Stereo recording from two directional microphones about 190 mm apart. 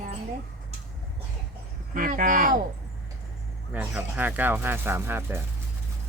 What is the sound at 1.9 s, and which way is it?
Speech, 45° right (ahead or behind).